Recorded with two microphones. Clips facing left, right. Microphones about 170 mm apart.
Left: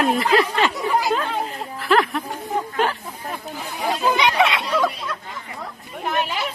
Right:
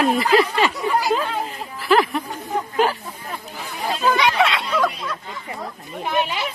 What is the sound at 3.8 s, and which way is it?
Chatter, 15° left (ahead or behind).